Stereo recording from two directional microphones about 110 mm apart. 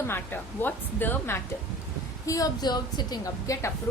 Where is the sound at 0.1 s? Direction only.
20° left (ahead or behind).